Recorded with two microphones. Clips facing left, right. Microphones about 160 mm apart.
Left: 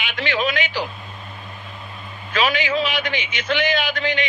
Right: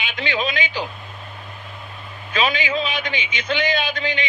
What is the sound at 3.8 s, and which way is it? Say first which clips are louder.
Speech: left 2 dB; 20° right (ahead or behind).